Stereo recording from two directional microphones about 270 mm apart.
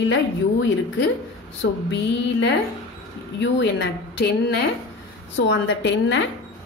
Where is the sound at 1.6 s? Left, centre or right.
Left.